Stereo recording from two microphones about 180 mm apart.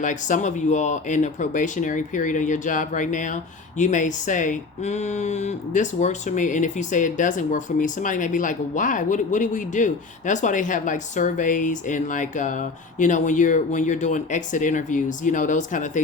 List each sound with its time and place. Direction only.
0.0 s speech: 45° left (ahead or behind)